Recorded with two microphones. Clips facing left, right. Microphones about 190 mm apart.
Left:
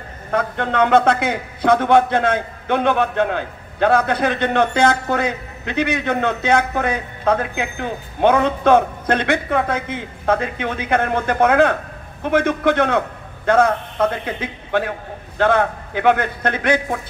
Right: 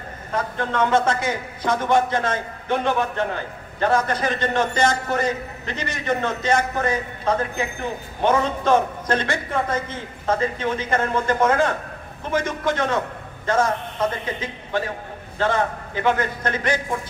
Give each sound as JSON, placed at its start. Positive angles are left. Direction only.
{"t": 0.3, "sound": "a man's voice", "side_deg": 60}